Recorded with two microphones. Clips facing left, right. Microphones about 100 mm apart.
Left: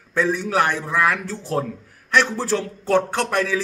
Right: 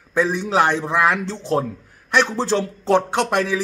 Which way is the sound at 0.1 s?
15° right (ahead or behind).